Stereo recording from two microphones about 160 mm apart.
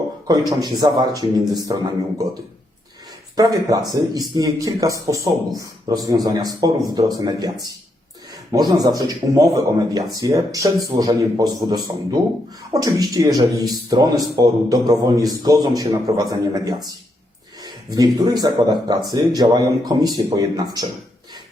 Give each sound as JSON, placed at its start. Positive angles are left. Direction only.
{"t": 0.3, "sound": "speech", "side_deg": -25}
{"t": 3.3, "sound": "speech", "side_deg": -20}
{"t": 8.5, "sound": "a man's voice", "side_deg": -25}